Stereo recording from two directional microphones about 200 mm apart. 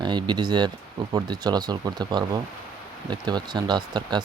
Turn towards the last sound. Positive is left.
turn(degrees=-20)  # may be behind; listen again after turning